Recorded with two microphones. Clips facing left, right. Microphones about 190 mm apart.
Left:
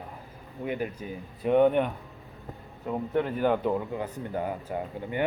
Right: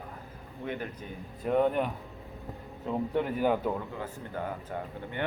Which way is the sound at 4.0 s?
15° left (ahead or behind).